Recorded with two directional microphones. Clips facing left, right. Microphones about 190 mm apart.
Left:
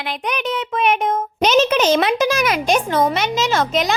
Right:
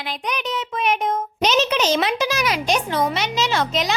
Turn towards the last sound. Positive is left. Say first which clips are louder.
# left 3 dB
turn(degrees=50)  # may be behind; listen again after turning